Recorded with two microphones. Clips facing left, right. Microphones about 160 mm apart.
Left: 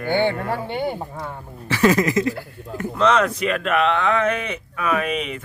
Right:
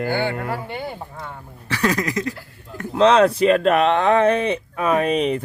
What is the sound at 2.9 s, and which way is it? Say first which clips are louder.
Speech: right 5 dB; 30° right (ahead or behind).